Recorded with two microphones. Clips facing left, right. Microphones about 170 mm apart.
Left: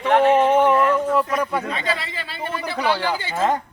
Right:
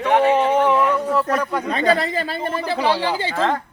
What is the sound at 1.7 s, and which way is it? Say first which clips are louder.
Speech: right 8 dB; 45° right (ahead or behind).